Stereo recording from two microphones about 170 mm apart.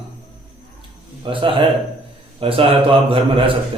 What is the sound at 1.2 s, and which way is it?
A man's voice, 30° right (ahead or behind).